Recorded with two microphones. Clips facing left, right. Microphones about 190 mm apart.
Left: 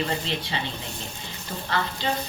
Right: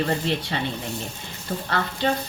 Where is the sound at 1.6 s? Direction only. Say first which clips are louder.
Right 2 dB; 50° right (ahead or behind).